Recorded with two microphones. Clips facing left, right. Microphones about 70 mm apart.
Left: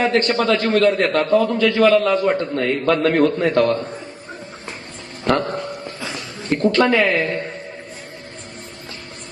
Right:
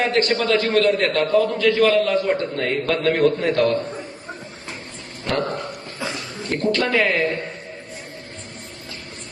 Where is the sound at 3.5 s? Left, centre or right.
Left.